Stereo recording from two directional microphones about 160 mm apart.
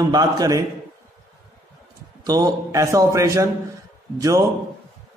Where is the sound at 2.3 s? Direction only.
25° right (ahead or behind).